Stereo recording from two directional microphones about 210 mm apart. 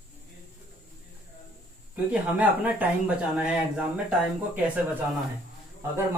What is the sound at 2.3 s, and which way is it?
Speech, 5° right (ahead or behind).